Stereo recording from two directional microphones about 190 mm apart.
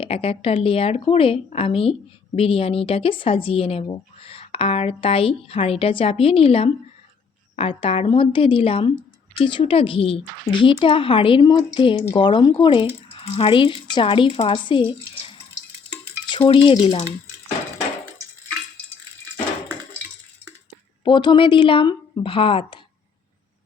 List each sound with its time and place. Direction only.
0.0 s a woman's voice: 30° left (ahead or behind)
16.6 s a woman's voice: 30° left (ahead or behind)
21.0 s a woman's voice: 25° left (ahead or behind)